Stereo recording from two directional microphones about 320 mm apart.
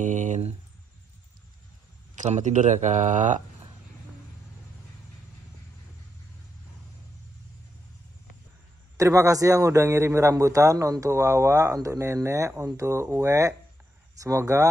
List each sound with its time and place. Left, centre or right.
0.0 s a sound: right
2.1 s speech: right
8.9 s a man's voice: centre